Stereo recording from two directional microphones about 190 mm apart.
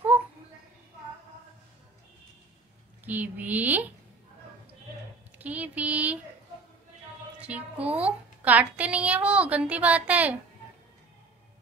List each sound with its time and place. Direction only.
3.1 s a woman's voice: 10° right (ahead or behind)
5.4 s a woman's voice: 10° right (ahead or behind)
7.3 s a woman's voice: 5° right (ahead or behind)